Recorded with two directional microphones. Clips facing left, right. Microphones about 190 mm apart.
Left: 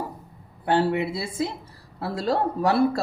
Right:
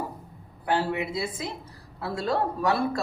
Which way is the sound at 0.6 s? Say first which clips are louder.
Left 4 dB; 30° left (ahead or behind).